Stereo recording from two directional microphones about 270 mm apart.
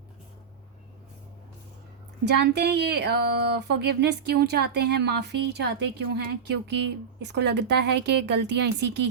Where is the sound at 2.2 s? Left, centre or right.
Right.